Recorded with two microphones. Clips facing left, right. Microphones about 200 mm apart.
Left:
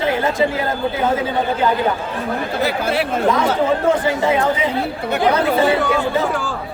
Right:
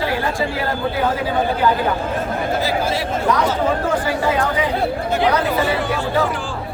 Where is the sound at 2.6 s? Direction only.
60° left (ahead or behind).